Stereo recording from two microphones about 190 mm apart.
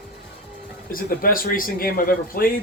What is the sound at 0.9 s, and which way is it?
Speech, 50° left (ahead or behind).